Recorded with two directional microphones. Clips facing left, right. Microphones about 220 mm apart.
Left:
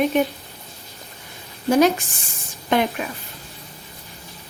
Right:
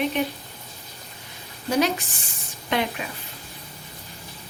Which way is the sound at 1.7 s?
45° left (ahead or behind).